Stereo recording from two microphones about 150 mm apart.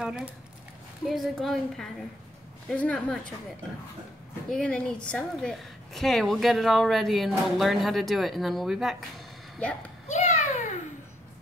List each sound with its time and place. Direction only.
0.0 s a woman's voice: 5° right (ahead or behind)
4.5 s a woman's voice: 5° left (ahead or behind)
9.6 s speech: 10° left (ahead or behind)
10.0 s a sound: 50° left (ahead or behind)